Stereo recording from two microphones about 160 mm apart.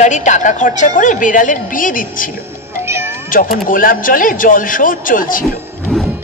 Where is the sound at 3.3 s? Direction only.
60° left (ahead or behind).